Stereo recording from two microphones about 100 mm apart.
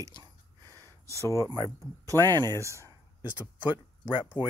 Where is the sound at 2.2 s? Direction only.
45° right (ahead or behind).